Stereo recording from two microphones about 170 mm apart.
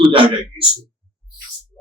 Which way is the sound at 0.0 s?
30° right (ahead or behind).